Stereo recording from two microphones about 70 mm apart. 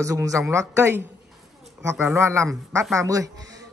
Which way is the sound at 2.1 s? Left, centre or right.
Right.